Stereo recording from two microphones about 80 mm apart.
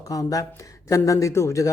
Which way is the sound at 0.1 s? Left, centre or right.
Left.